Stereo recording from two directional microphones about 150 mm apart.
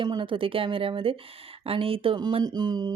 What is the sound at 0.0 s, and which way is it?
A woman's voice, 30° right (ahead or behind).